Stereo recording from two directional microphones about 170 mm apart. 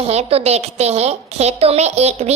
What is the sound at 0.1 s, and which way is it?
A woman's voice, 35° right (ahead or behind).